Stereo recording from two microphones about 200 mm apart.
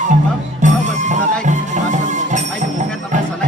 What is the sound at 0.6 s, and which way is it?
Music, 40° right (ahead or behind).